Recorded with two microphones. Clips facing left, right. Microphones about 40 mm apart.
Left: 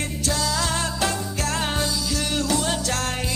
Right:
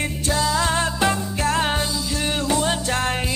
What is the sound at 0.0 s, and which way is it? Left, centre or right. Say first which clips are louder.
Music: right 3 dB; right.